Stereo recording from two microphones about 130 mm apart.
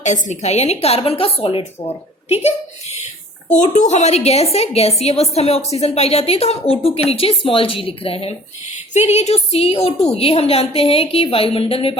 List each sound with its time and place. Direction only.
0.0 s a woman's voice: 65° left (ahead or behind)
3.5 s a woman's voice: 65° left (ahead or behind); by 8.4 s 45° left (ahead or behind)
8.9 s a woman's voice: 60° left (ahead or behind)